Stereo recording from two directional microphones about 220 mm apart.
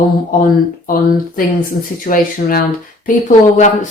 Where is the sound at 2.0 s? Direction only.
40° left (ahead or behind).